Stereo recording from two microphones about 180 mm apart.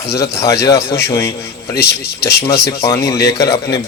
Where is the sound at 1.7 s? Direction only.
65° left (ahead or behind).